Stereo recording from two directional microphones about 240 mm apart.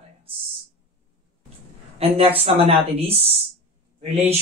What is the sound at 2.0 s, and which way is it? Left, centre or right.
Speech, right.